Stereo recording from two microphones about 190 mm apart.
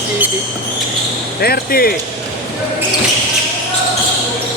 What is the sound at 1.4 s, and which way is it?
Speech, 55° left (ahead or behind).